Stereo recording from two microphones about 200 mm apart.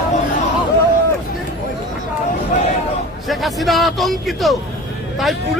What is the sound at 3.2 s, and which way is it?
Speech, centre (ahead or behind).